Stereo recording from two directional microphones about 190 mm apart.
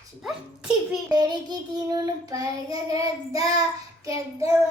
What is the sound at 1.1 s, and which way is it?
Child singing, 20° right (ahead or behind).